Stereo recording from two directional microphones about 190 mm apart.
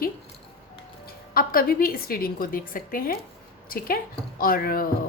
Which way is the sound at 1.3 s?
50° left (ahead or behind).